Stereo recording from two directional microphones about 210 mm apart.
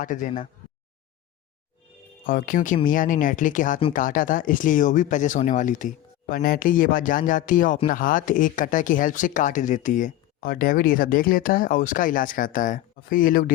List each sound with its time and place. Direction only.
0.0 s speech: 40° left (ahead or behind)
2.2 s speech: 40° left (ahead or behind)